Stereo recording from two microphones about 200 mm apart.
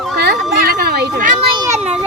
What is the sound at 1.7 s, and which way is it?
Children playing, 5° right (ahead or behind).